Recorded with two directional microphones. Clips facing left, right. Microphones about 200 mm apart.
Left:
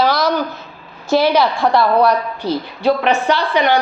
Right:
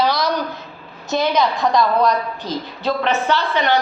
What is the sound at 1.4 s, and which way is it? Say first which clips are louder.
A woman's voice: left 2 dB; 70° left (ahead or behind).